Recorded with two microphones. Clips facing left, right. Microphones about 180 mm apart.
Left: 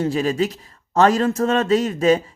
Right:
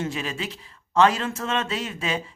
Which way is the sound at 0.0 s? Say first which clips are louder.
Left 10 dB; 35° left (ahead or behind).